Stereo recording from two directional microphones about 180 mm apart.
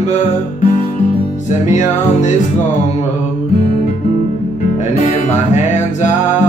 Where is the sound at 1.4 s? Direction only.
40° left (ahead or behind).